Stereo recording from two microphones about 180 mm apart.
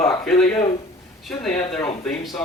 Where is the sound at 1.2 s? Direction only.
5° left (ahead or behind).